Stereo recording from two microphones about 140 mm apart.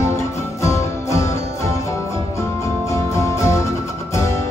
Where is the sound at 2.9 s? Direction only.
20° left (ahead or behind).